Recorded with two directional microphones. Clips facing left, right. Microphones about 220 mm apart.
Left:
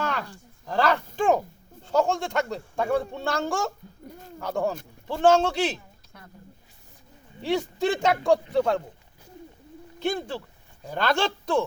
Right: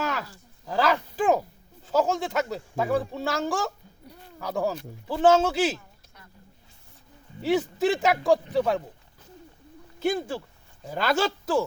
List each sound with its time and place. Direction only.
0.0 s speech: 5° right (ahead or behind)
4.0 s a sound: 50° left (ahead or behind)
4.4 s speech: centre (ahead or behind)
7.4 s speech: 5° right (ahead or behind)
10.0 s speech: 10° right (ahead or behind)